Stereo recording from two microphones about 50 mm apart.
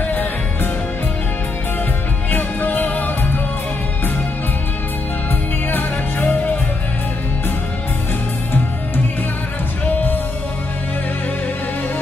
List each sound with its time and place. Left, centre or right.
2.3 s music: left
5.7 s music: left
9.8 s music: left